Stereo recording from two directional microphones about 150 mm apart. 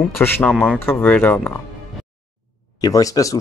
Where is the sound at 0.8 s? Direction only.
15° left (ahead or behind).